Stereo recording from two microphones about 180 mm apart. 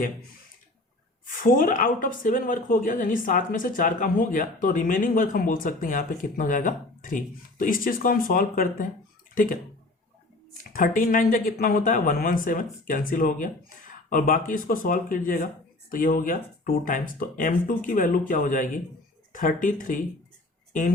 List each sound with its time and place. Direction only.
1.2 s speech: 45° left (ahead or behind)
10.6 s speech: 50° left (ahead or behind)